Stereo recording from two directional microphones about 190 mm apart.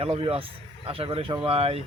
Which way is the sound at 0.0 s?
30° right (ahead or behind).